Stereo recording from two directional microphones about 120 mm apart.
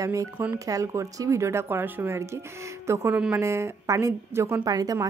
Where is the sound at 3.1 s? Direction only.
10° right (ahead or behind).